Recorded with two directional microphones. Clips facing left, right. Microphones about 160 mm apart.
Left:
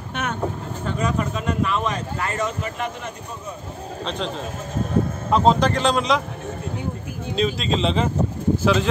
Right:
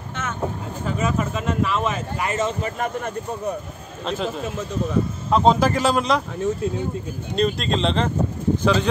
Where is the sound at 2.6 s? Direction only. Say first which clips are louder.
Right 3 dB; 50° right (ahead or behind).